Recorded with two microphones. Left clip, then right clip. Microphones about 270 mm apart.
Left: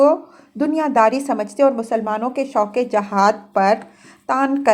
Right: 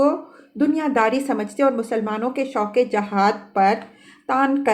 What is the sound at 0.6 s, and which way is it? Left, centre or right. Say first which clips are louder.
A woman's voice: left 4 dB; centre.